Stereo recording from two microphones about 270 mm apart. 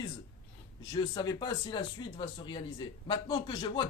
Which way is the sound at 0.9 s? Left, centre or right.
Centre.